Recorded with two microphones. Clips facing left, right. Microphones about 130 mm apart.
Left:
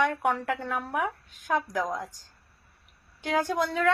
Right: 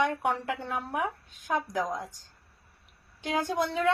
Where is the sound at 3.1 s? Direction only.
20° right (ahead or behind).